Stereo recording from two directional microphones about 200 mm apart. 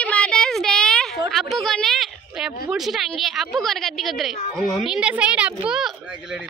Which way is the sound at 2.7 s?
Centre (ahead or behind).